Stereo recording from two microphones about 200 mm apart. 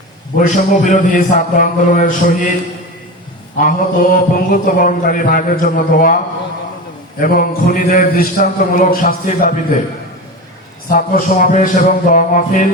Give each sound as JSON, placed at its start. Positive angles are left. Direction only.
{"t": 0.3, "sound": "a man's voice", "side_deg": 40}
{"t": 3.6, "sound": "a man's voice", "side_deg": 40}
{"t": 7.2, "sound": "a man's voice", "side_deg": 45}
{"t": 10.8, "sound": "a man's voice", "side_deg": 45}